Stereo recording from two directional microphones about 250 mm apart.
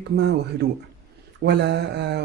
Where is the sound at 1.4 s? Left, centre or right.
Right.